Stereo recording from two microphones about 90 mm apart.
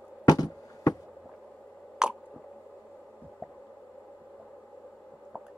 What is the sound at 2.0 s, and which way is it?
Squish, 10° right (ahead or behind).